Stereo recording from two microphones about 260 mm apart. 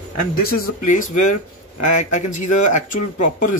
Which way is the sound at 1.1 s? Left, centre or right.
Left.